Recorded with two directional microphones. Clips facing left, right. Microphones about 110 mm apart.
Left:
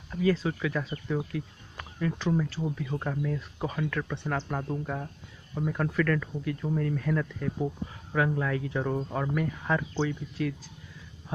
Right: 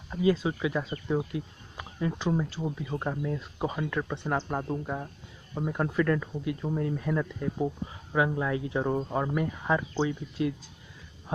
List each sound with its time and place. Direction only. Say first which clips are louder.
0.1 s speech: right 1 dB; 15° right (ahead or behind)